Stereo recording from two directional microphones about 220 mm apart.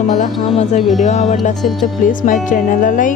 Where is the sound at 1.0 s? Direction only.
35° left (ahead or behind).